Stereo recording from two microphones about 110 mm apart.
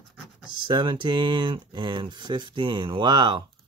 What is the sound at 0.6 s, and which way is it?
Speech, 45° right (ahead or behind).